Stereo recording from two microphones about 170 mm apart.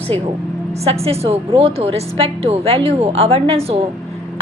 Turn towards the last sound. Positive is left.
turn(degrees=-35)  # may be behind; listen again after turning